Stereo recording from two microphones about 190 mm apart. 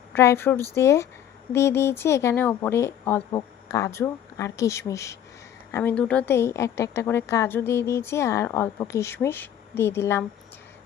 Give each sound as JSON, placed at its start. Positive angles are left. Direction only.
{"t": 0.1, "sound": "a woman's voice", "side_deg": 15}